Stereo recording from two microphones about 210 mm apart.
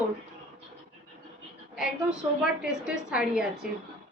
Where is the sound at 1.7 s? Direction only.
5° right (ahead or behind).